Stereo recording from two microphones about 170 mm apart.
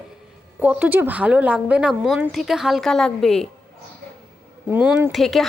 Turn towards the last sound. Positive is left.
turn(degrees=0)  # may be behind; listen again after turning